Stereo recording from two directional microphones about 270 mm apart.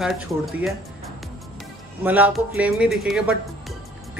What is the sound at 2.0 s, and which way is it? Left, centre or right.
Speech, centre.